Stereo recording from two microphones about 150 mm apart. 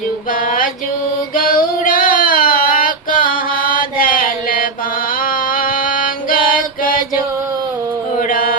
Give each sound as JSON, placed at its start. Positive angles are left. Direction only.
{"t": 1.4, "sound": "child singing", "side_deg": 70}
{"t": 5.5, "sound": "music", "side_deg": 70}
{"t": 8.3, "sound": "mantra", "side_deg": 70}